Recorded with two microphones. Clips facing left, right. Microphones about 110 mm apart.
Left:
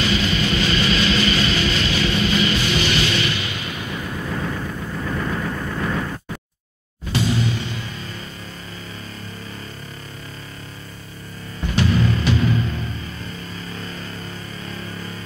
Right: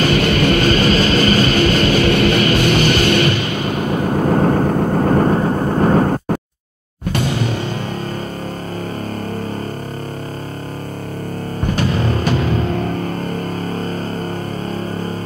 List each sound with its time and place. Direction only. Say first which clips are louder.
0.0 s music: right 7 dB; 55° right (ahead or behind)
11.6 s music: right 1 dB; 45° right (ahead or behind)